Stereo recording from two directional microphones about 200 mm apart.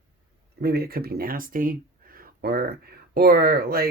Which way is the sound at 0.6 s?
50° right (ahead or behind).